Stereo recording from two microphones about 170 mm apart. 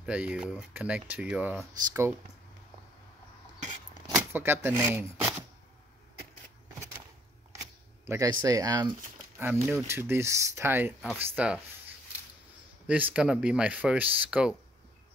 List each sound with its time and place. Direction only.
0.0 s speech: 5° right (ahead or behind)
4.1 s speech: 15° right (ahead or behind)
8.1 s speech: 20° right (ahead or behind)
9.4 s speech: 10° right (ahead or behind)
12.8 s speech: 10° right (ahead or behind)